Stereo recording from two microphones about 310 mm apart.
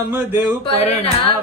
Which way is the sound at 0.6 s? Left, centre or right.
Centre.